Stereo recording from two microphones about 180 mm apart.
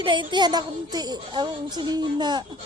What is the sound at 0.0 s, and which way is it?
Speech, 25° right (ahead or behind).